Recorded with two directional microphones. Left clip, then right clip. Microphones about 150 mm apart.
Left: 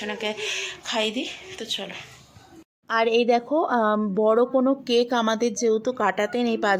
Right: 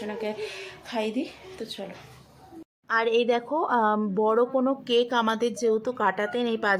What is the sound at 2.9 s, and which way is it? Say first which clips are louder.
Speech: left 3 dB; 25° left (ahead or behind).